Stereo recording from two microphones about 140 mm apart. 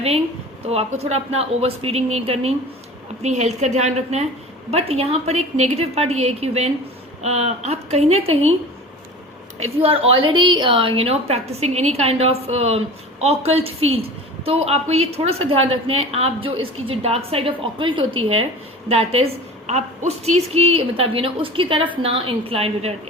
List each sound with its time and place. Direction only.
0.7 s a woman's voice: 50° right (ahead or behind)
9.7 s a woman's voice: 45° right (ahead or behind)